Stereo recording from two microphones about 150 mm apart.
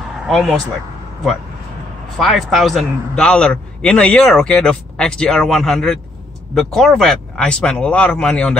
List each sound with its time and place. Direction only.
0.3 s a man's voice: centre (ahead or behind)
2.1 s a man's voice: centre (ahead or behind)